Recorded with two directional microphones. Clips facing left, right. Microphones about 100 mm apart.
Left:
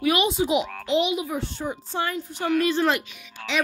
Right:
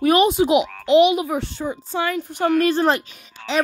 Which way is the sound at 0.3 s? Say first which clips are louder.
Right 6 dB; 70° right (ahead or behind).